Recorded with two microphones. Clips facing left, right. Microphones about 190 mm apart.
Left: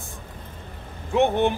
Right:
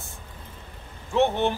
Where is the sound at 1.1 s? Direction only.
15° left (ahead or behind).